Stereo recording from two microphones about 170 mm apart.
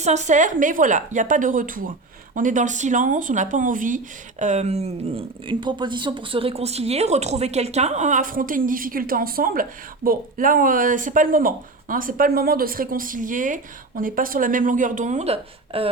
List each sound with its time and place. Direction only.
0.0 s speech: 45° right (ahead or behind)